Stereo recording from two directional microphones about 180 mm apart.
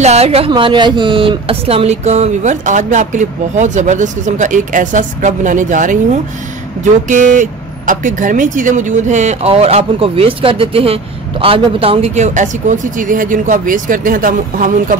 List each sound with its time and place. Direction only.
0.0 s a woman's voice: 35° right (ahead or behind)